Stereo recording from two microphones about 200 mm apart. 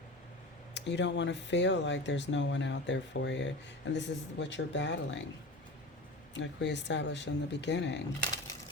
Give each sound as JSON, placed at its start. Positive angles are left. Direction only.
{"t": 0.7, "sound": "speech", "side_deg": 60}
{"t": 6.3, "sound": "speech", "side_deg": 60}